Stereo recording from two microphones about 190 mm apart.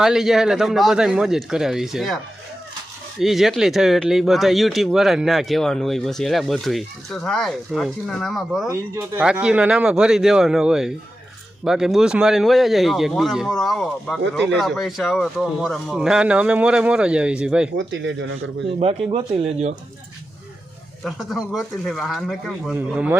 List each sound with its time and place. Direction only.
0.0 s speech: centre (ahead or behind)
3.2 s speech: centre (ahead or behind)
8.7 s speech: 10° right (ahead or behind)
17.7 s speech: 75° right (ahead or behind)
18.7 s speech: 30° right (ahead or behind)
21.0 s speech: centre (ahead or behind)